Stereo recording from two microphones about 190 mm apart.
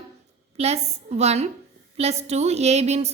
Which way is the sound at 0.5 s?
35° right (ahead or behind).